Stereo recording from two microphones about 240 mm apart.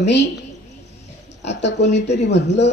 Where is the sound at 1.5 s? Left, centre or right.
Left.